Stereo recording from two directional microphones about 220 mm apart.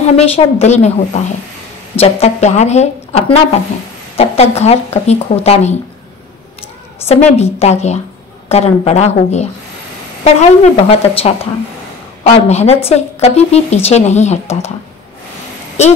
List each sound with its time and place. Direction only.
0.1 s a woman's voice: 30° left (ahead or behind)
7.1 s a woman's voice: 30° left (ahead or behind)